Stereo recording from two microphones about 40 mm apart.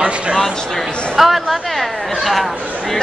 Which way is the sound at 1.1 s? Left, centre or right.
Centre.